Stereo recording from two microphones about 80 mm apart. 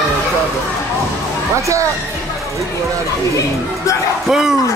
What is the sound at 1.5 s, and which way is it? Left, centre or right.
Speech, right.